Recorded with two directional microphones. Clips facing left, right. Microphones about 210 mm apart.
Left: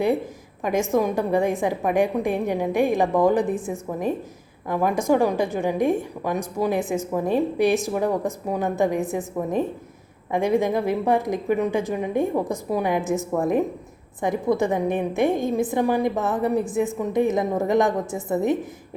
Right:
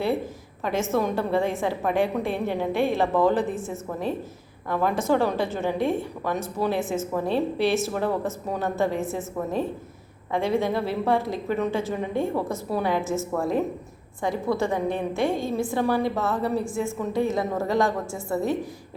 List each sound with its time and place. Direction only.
0.6 s a woman's voice: 15° left (ahead or behind)